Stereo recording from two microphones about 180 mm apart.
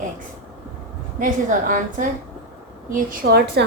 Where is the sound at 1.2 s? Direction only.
50° right (ahead or behind).